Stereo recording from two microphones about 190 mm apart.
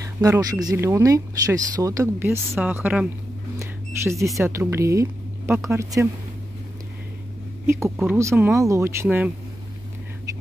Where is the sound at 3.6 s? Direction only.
15° right (ahead or behind).